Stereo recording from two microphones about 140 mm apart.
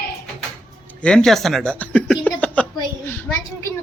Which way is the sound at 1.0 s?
5° left (ahead or behind).